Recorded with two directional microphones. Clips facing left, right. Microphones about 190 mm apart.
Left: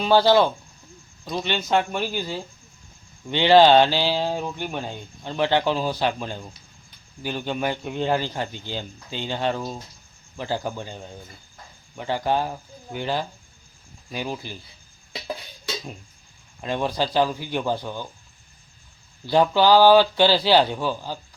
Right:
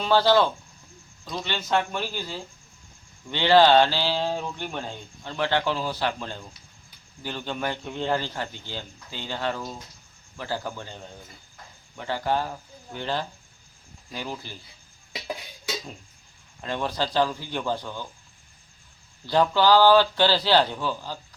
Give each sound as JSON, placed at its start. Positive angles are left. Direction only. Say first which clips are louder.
{"t": 0.0, "sound": "speech", "louder": "left 3 dB", "side_deg": 15}
{"t": 16.6, "sound": "speech", "louder": "left 3 dB", "side_deg": 15}
{"t": 19.2, "sound": "speech", "louder": "left 3 dB", "side_deg": 15}